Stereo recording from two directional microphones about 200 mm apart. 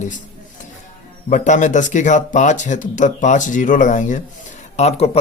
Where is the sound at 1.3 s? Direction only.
40° left (ahead or behind).